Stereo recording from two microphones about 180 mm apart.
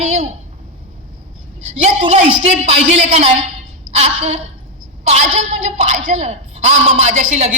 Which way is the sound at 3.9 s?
35° right (ahead or behind).